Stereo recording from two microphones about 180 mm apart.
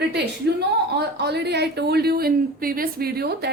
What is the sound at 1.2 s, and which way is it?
Speech, 70° right (ahead or behind).